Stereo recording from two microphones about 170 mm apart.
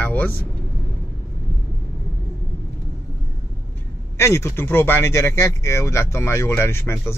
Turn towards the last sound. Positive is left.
turn(degrees=15)  # may be behind; listen again after turning